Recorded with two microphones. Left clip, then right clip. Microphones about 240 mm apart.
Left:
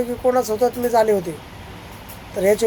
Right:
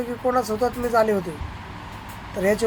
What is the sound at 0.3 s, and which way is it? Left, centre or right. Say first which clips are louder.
Speech: left 4 dB; centre.